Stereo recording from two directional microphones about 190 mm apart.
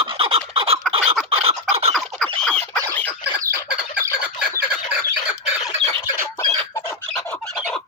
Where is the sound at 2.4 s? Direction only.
5° left (ahead or behind).